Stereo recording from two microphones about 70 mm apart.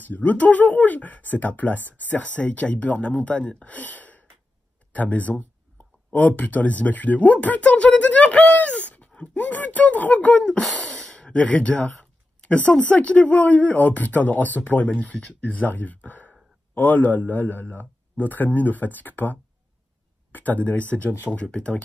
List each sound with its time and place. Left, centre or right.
0.0 s speech: left
4.9 s a sound: left
6.1 s speech: left